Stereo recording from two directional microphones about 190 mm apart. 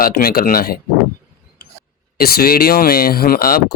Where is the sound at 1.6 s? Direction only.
55° left (ahead or behind).